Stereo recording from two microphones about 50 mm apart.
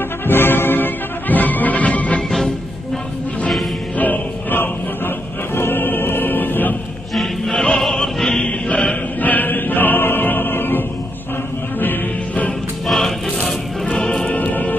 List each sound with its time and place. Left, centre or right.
0.3 s music: left
4.0 s music: left
7.2 s music: centre
7.8 s opera: centre
8.5 s choir: left
9.2 s choir: left
11.8 s music: left
12.8 s music: centre
14.3 s music: left